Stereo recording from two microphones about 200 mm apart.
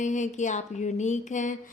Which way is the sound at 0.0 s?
40° left (ahead or behind).